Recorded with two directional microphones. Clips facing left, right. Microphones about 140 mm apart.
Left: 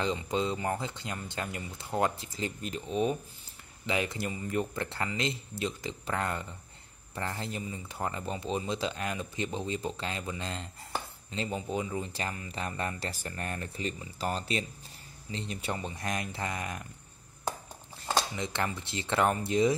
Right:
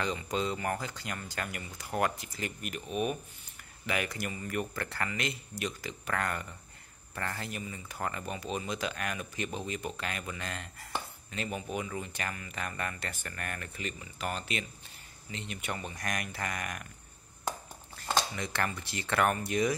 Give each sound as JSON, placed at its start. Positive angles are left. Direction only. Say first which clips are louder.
{"t": 0.0, "sound": "speech", "louder": "left 2 dB", "side_deg": 20}
{"t": 18.3, "sound": "speech", "louder": "left 1 dB", "side_deg": 20}